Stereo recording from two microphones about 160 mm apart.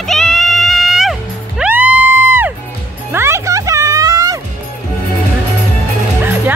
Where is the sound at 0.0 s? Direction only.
Centre (ahead or behind); by 4.4 s 25° right (ahead or behind).